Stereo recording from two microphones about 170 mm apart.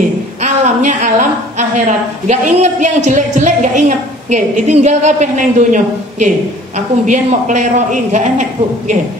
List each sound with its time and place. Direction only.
0.4 s a woman's voice: 45° right (ahead or behind)